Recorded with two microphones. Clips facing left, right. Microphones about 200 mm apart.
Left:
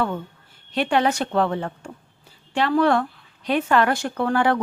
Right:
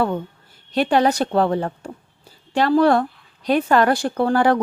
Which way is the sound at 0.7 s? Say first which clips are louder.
Right 3 dB; 40° right (ahead or behind).